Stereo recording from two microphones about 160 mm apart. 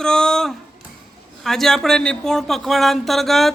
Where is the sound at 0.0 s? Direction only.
5° left (ahead or behind).